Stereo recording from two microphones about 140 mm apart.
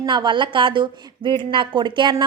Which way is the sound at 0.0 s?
30° right (ahead or behind).